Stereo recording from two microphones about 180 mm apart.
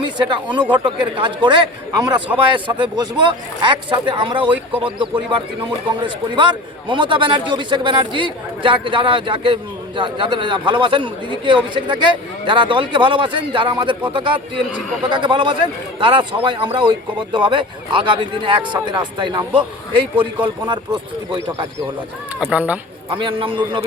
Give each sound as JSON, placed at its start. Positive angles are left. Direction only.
{"t": 0.0, "sound": "a man's voice", "side_deg": -25}
{"t": 22.4, "sound": "speech", "side_deg": -5}
{"t": 23.0, "sound": "a man's voice", "side_deg": -30}